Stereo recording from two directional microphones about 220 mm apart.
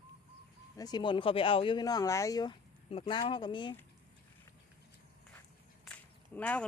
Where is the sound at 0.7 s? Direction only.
20° left (ahead or behind).